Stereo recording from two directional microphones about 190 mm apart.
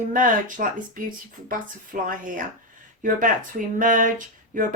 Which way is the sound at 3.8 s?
45° right (ahead or behind).